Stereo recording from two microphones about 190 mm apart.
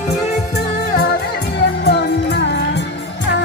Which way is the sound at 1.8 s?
60° left (ahead or behind).